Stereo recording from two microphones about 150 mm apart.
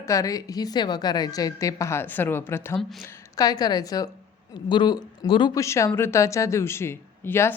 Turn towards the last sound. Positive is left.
turn(degrees=15)  # may be behind; listen again after turning